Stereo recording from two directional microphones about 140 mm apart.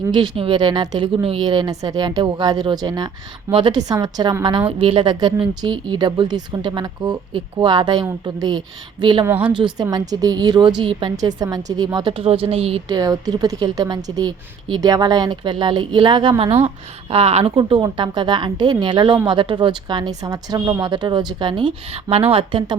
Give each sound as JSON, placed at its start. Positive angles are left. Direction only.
{"t": 0.1, "sound": "a woman's voice", "side_deg": -40}
{"t": 9.2, "sound": "a woman's voice", "side_deg": -10}
{"t": 9.6, "sound": "a woman's voice", "side_deg": -35}
{"t": 12.9, "sound": "a woman's voice", "side_deg": -25}